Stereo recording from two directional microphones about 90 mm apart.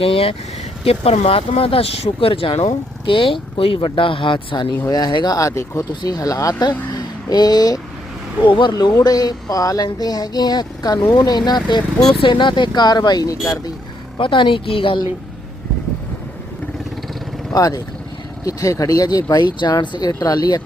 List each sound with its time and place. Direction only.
0.0 s speech: 90° left
3.1 s speech: 70° left (ahead or behind)
4.9 s speech: 50° left (ahead or behind)
6.9 s a sound: 50° left (ahead or behind)
8.4 s speech: 65° left (ahead or behind)
9.0 s speech: 45° left (ahead or behind)
12.2 s speech: 60° left (ahead or behind)
14.2 s speech: 65° left (ahead or behind)
17.5 s speech: 40° left (ahead or behind)